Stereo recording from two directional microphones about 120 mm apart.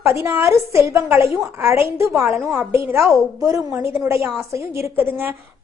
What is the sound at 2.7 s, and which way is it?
A woman's voice, 20° right (ahead or behind).